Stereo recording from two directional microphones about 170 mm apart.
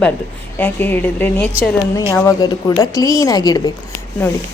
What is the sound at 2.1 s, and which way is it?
Speech, 20° left (ahead or behind).